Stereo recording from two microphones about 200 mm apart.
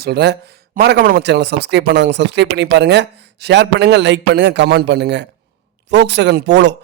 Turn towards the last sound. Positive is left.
turn(degrees=-60)  # may be behind; listen again after turning